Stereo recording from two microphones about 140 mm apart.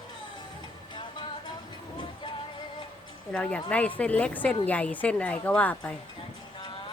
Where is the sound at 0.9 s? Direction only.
35° left (ahead or behind).